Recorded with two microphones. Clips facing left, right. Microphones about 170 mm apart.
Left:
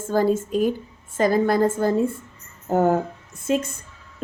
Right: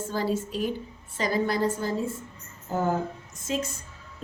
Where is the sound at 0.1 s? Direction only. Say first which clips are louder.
Left 9 dB; 50° left (ahead or behind).